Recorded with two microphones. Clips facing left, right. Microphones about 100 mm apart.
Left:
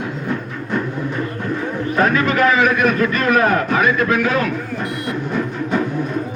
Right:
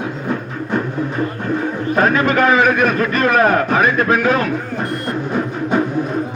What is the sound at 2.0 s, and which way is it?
A man's voice, 35° right (ahead or behind).